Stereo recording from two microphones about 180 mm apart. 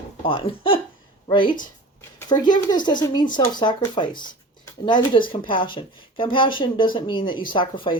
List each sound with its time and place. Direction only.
0.3 s speech: 30° left (ahead or behind)